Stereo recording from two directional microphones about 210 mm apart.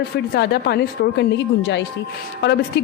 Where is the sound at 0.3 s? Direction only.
50° left (ahead or behind).